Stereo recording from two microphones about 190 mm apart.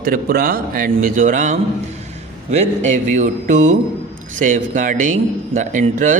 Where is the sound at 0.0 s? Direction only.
50° right (ahead or behind).